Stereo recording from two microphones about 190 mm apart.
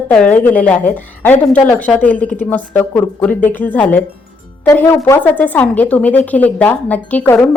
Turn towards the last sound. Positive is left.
turn(degrees=10)  # may be behind; listen again after turning